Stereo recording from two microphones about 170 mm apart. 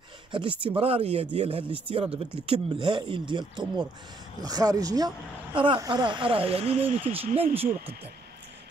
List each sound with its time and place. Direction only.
0.3 s speech: 30° right (ahead or behind)